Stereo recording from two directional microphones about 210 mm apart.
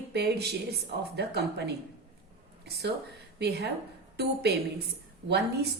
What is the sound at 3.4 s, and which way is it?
Speech, 50° right (ahead or behind).